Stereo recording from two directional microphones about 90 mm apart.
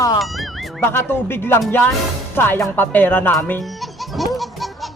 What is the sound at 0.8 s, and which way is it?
Speech, 25° left (ahead or behind).